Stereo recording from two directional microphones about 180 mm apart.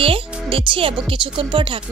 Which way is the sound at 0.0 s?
30° right (ahead or behind).